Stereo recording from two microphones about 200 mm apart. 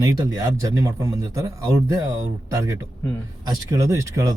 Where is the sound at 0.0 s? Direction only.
15° right (ahead or behind).